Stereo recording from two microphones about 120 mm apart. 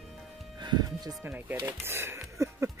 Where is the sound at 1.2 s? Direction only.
15° right (ahead or behind).